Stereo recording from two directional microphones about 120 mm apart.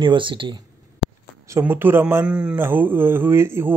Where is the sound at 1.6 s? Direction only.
15° right (ahead or behind).